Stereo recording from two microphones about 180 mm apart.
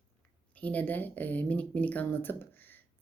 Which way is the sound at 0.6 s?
10° left (ahead or behind).